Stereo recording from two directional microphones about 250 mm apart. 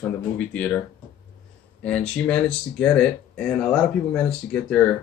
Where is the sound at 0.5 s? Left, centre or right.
Centre.